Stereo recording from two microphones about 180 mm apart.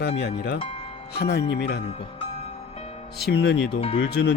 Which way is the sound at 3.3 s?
70° left (ahead or behind).